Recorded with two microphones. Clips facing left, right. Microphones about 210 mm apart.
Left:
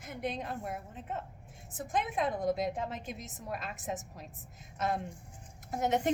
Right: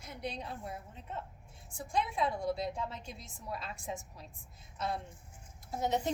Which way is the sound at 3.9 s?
60° left (ahead or behind).